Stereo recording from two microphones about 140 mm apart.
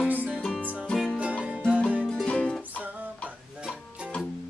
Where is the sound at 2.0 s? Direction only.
5° left (ahead or behind).